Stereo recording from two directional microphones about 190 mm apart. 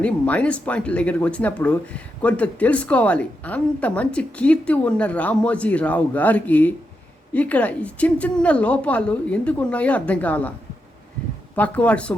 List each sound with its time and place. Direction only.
0.0 s speech: 5° left (ahead or behind)
11.5 s speech: 10° left (ahead or behind)